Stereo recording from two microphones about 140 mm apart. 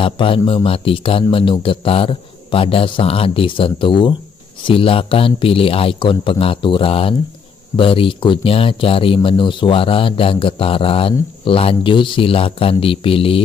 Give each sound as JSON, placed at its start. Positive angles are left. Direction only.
{"t": 0.0, "sound": "a man's voice", "side_deg": 40}